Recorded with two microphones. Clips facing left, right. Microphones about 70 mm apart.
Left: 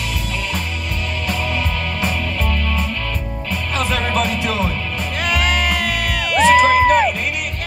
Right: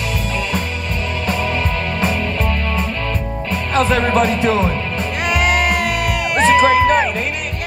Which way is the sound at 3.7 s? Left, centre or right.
Right.